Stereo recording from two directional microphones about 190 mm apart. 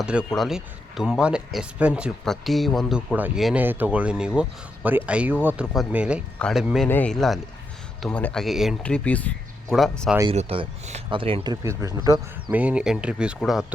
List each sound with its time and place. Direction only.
0.0 s speech: 5° right (ahead or behind)
10.3 s speech: 30° right (ahead or behind)
11.6 s speech: 15° right (ahead or behind)
12.5 s speech: 10° right (ahead or behind)